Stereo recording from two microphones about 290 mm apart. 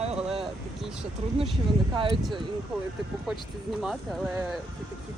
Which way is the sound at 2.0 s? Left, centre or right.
Centre.